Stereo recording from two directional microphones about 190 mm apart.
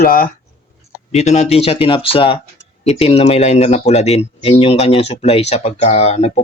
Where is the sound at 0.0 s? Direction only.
50° left (ahead or behind).